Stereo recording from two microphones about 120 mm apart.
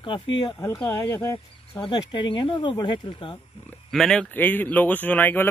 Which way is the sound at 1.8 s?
40° left (ahead or behind).